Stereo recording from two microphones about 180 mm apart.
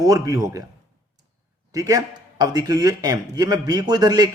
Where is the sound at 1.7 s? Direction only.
20° right (ahead or behind).